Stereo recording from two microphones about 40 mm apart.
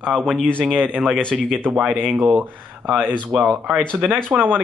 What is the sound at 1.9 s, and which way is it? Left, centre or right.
Speech, right.